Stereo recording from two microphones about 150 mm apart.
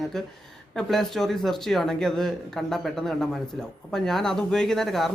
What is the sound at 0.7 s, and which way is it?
Speech, centre (ahead or behind).